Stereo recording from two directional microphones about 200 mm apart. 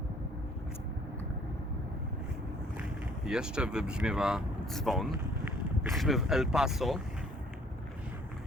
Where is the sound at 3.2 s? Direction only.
5° right (ahead or behind).